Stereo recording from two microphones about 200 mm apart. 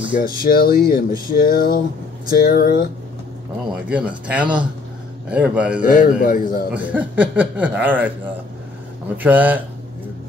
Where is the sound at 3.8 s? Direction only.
5° right (ahead or behind).